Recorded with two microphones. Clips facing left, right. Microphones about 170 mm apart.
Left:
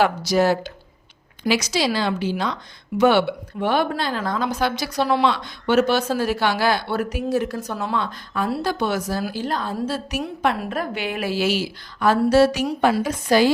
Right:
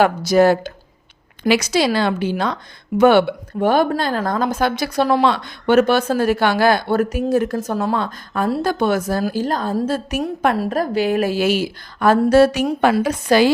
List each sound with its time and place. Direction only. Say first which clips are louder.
0.0 s a woman's voice: right 5 dB; 50° right (ahead or behind); by 13.5 s 70° right (ahead or behind)